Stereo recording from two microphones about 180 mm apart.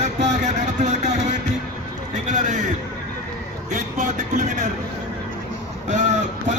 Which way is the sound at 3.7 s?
45° right (ahead or behind).